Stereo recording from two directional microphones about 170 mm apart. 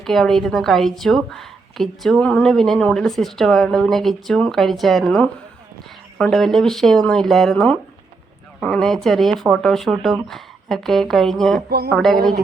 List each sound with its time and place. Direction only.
0.0 s a woman's voice: centre (ahead or behind)
12.1 s speech: 60° right (ahead or behind)